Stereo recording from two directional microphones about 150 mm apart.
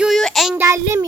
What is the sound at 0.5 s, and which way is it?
Speech, 15° right (ahead or behind).